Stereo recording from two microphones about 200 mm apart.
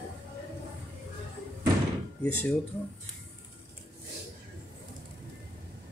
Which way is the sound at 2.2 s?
10° left (ahead or behind).